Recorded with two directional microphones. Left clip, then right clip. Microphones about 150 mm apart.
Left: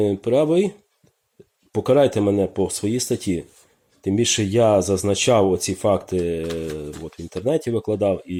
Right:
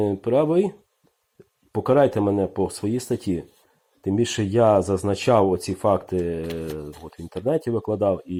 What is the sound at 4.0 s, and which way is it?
Speech, 10° left (ahead or behind).